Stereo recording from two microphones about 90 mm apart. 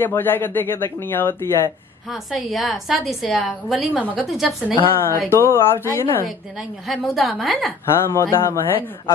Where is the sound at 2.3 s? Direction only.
Centre (ahead or behind).